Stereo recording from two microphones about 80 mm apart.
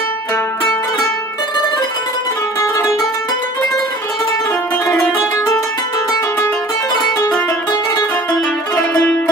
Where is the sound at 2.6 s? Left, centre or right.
Left.